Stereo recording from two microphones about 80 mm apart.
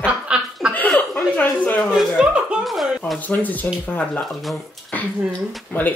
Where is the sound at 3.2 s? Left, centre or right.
Centre.